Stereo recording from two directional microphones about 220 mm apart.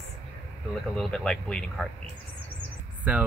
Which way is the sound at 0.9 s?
5° left (ahead or behind).